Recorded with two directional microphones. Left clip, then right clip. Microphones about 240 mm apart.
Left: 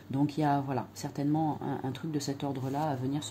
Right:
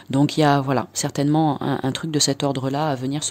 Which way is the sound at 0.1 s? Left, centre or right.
Right.